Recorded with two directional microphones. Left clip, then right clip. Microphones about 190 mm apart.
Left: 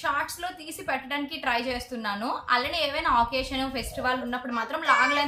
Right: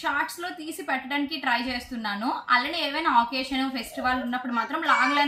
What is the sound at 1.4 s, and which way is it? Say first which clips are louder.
A woman's voice: left 1 dB; 20° left (ahead or behind).